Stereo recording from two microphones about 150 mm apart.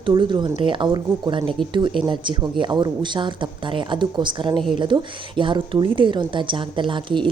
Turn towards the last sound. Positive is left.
turn(degrees=-35)  # may be behind; listen again after turning